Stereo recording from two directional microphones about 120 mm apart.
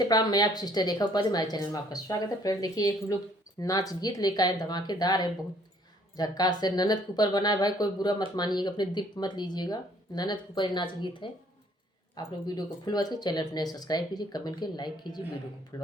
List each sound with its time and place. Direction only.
0.0 s speech: 35° left (ahead or behind)
15.7 s speech: 30° left (ahead or behind)